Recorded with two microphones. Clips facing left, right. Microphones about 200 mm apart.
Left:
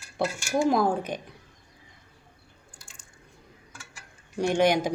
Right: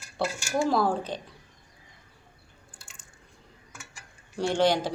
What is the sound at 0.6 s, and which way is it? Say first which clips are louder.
Speech: left 2 dB; 15° left (ahead or behind).